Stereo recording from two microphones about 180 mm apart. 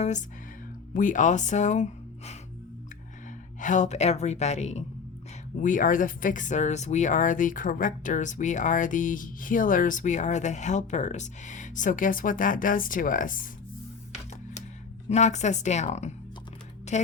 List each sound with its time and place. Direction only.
0.0 s speech: 40° left (ahead or behind)
3.6 s speech: 45° left (ahead or behind)
15.1 s speech: 40° left (ahead or behind)